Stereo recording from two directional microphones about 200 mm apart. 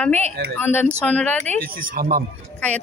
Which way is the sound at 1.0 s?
5° left (ahead or behind).